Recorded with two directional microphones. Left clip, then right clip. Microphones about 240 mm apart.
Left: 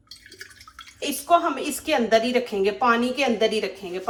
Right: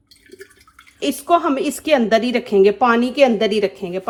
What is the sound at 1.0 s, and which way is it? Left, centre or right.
A woman's voice, right.